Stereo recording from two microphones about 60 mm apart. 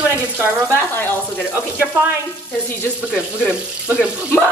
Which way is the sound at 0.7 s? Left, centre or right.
Left.